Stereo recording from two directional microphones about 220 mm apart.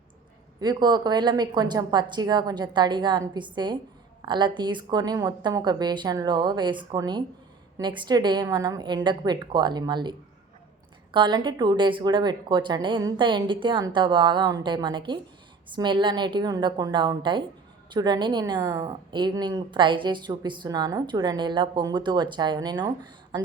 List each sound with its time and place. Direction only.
0.6 s a woman's voice: 20° right (ahead or behind)